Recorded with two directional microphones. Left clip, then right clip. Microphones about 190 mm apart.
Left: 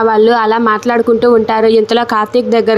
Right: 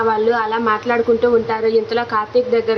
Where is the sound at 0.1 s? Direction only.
35° left (ahead or behind).